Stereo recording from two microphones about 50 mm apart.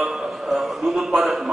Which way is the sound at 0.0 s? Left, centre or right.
Centre.